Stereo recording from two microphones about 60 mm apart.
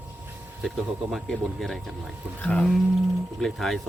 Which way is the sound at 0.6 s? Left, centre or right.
Centre.